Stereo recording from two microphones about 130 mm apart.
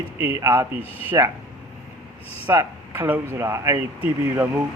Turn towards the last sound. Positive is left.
turn(degrees=-20)  # may be behind; listen again after turning